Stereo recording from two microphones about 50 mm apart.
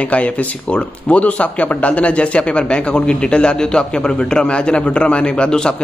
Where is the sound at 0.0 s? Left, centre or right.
Left.